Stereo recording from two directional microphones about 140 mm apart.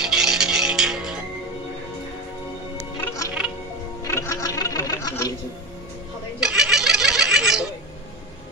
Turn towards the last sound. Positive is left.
turn(degrees=-5)  # may be behind; listen again after turning